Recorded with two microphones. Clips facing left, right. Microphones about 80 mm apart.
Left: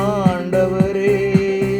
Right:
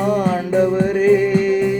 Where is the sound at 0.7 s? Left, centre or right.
Left.